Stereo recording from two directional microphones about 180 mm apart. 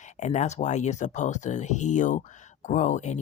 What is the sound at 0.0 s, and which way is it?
Speech, 40° left (ahead or behind).